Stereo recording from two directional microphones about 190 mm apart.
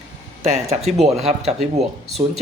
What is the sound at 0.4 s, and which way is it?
Speech, 35° right (ahead or behind).